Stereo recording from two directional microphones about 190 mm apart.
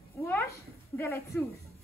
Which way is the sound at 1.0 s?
15° left (ahead or behind).